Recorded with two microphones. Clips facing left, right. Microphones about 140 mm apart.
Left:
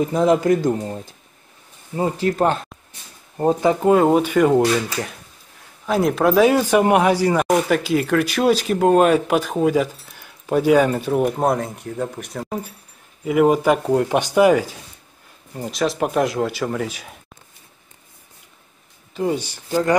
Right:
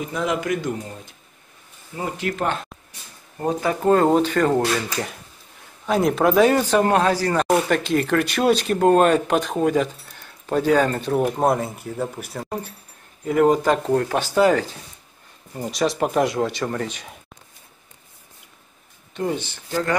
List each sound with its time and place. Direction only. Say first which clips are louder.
0.0 s speech: left 8 dB; 35° left (ahead or behind)
3.8 s speech: even; 5° left (ahead or behind)
7.4 s speech: left 1 dB; centre (ahead or behind)
15.5 s speech: even; centre (ahead or behind)
19.1 s speech: left 3 dB; 10° left (ahead or behind)